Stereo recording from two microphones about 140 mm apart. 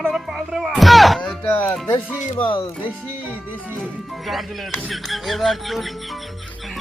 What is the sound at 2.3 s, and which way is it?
Speech, 40° left (ahead or behind).